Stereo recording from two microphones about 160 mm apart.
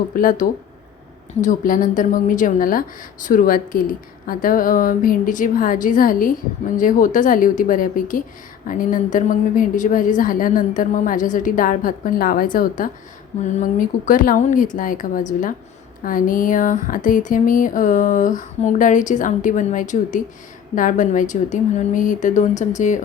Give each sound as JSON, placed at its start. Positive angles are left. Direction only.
{"t": 0.1, "sound": "a woman's voice", "side_deg": 55}